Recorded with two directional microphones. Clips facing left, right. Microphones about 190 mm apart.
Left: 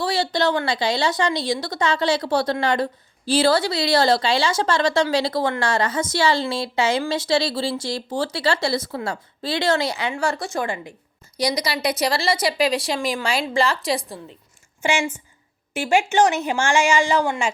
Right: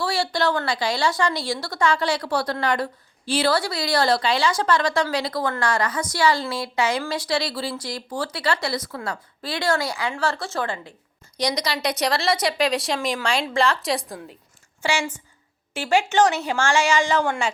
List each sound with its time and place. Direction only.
0.0 s a woman's voice: 20° left (ahead or behind); by 14.3 s centre (ahead or behind)
14.8 s a woman's voice: 20° left (ahead or behind)